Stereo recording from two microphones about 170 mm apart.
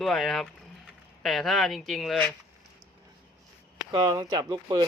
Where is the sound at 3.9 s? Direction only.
25° right (ahead or behind).